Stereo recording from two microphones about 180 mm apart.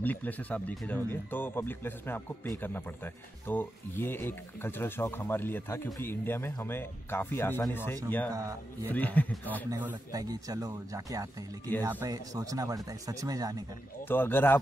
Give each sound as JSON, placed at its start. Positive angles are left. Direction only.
{"t": 0.0, "sound": "speech", "side_deg": 10}
{"t": 3.4, "sound": "speech", "side_deg": 10}
{"t": 8.3, "sound": "a man's voice", "side_deg": -20}
{"t": 8.8, "sound": "speech", "side_deg": 10}
{"t": 9.7, "sound": "speech", "side_deg": -15}
{"t": 14.0, "sound": "speech", "side_deg": 10}